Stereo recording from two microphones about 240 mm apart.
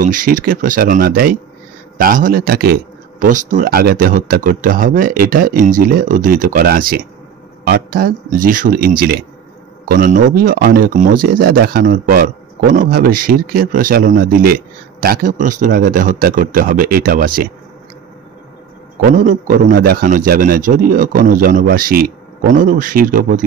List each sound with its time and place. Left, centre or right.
0.0 s speech: right
19.0 s speech: right